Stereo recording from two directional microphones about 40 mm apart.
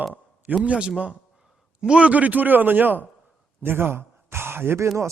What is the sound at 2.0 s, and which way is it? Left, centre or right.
A man's voice, right.